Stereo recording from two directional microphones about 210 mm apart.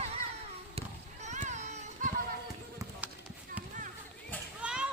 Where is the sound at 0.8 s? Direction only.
35° right (ahead or behind).